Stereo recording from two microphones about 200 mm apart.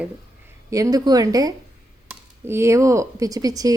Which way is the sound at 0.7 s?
15° right (ahead or behind).